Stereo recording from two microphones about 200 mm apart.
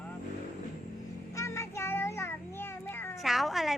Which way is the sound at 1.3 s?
15° left (ahead or behind).